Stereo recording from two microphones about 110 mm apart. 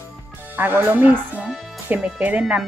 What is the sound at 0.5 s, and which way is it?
Speech, 15° right (ahead or behind).